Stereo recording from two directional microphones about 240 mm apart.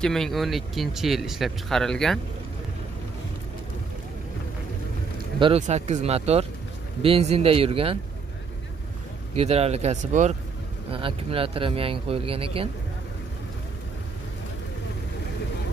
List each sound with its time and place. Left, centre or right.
0.0 s speech: centre
5.4 s speech: right
9.3 s speech: right